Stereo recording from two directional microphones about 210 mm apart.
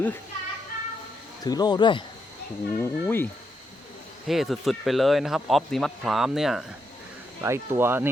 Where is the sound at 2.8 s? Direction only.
10° left (ahead or behind).